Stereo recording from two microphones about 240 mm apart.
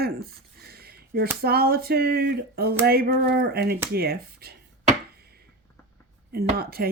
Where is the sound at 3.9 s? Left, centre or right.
Right.